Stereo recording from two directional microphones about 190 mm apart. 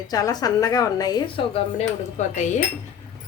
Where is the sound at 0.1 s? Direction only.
20° left (ahead or behind).